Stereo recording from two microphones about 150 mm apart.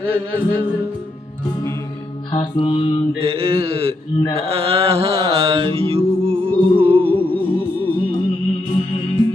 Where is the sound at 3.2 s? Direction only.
40° right (ahead or behind).